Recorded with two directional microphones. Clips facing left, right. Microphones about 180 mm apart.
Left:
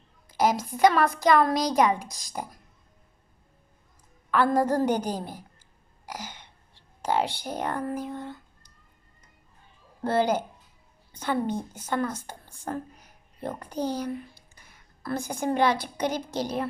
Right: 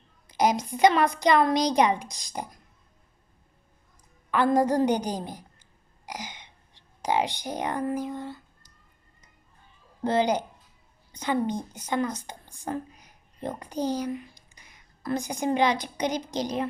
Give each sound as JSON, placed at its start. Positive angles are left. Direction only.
{"t": 0.3, "sound": "a woman's voice", "side_deg": -15}
{"t": 1.5, "sound": "speech", "side_deg": 5}
{"t": 4.5, "sound": "a woman's voice", "side_deg": -15}
{"t": 10.0, "sound": "a woman's voice", "side_deg": -15}